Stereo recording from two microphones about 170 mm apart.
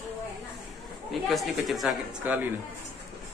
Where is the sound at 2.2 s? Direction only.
10° right (ahead or behind).